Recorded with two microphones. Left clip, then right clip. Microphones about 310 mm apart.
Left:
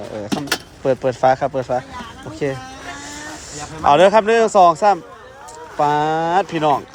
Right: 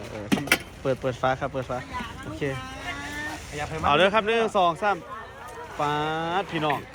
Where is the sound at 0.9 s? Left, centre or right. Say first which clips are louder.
Left 10 dB; left.